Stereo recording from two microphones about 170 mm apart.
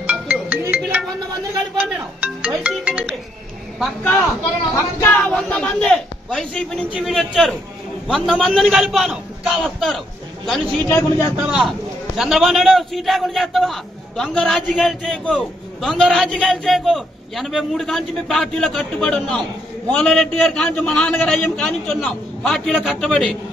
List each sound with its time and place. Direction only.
0.0 s music: 10° right (ahead or behind)
3.8 s a man's voice: 10° left (ahead or behind)
10.9 s speech: 15° left (ahead or behind)
11.3 s a man's voice: 5° right (ahead or behind)